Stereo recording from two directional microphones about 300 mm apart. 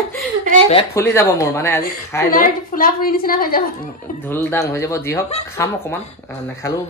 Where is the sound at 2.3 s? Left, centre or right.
Left.